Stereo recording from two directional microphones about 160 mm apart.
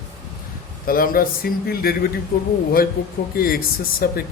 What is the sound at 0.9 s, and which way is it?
Speech, 65° left (ahead or behind).